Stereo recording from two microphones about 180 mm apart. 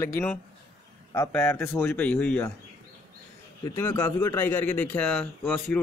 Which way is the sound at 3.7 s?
15° left (ahead or behind).